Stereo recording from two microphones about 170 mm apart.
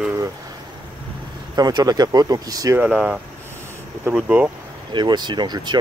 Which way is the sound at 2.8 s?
5° right (ahead or behind).